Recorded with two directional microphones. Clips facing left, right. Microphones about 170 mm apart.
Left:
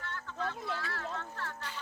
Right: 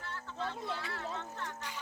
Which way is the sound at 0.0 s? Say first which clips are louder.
Left 2 dB; 30° right (ahead or behind).